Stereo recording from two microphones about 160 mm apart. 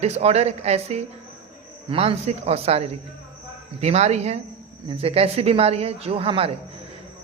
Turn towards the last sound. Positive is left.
turn(degrees=-35)  # may be behind; listen again after turning